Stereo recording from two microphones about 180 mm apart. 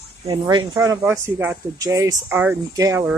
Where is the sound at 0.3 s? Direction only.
25° right (ahead or behind).